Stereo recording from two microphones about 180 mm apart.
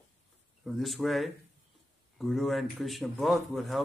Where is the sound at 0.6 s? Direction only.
Centre (ahead or behind).